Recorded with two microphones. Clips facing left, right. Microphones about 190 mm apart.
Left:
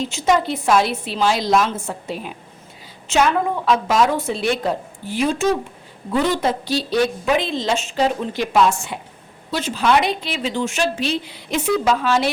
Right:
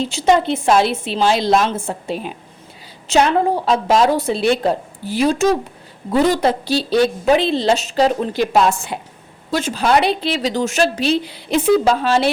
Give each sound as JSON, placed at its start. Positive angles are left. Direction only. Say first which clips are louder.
{"t": 0.0, "sound": "a woman's voice", "louder": "right 3 dB", "side_deg": -30}
{"t": 3.1, "sound": "a woman's voice", "louder": "right 3 dB", "side_deg": -35}